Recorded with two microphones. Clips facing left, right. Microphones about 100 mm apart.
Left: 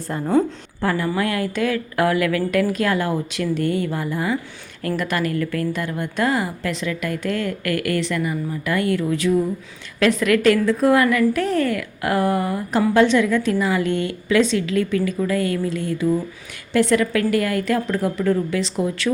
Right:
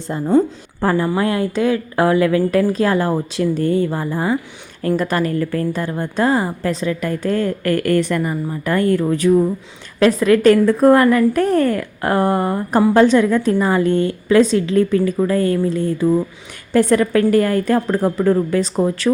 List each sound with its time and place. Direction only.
0.8 s a woman's voice: 30° right (ahead or behind)